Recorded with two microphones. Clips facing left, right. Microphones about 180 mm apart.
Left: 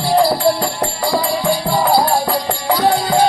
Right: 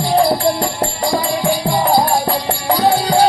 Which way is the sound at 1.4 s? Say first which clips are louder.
Right 1 dB; 15° right (ahead or behind).